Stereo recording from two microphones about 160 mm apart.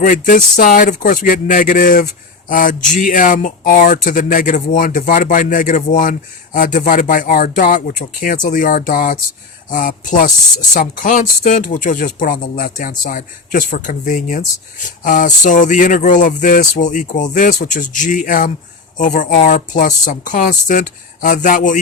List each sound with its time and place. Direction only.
0.0 s speech: 55° left (ahead or behind)